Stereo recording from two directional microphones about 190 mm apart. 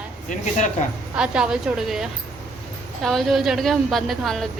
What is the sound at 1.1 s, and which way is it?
Speech, 5° right (ahead or behind).